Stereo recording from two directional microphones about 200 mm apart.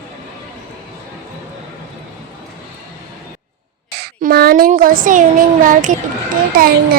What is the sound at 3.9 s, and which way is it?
Speech, 50° right (ahead or behind).